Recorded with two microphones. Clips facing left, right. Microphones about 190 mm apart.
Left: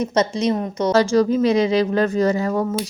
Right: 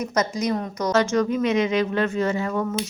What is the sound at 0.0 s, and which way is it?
A woman's voice, 30° left (ahead or behind).